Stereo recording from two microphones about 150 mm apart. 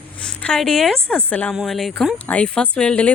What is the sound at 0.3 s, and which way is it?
A woman's voice, 5° left (ahead or behind).